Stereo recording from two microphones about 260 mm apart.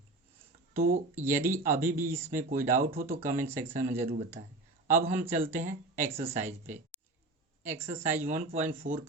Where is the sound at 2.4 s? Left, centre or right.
Right.